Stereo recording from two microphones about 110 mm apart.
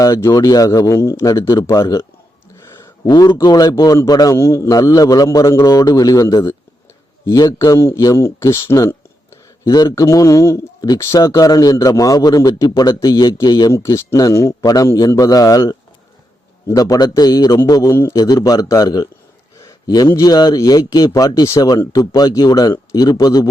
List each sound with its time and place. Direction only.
0.0 s a man's voice: 30° left (ahead or behind)
2.8 s a sound: 35° left (ahead or behind)
3.4 s a man's voice: 35° left (ahead or behind)